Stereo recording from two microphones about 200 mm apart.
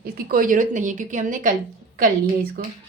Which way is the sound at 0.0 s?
45° right (ahead or behind).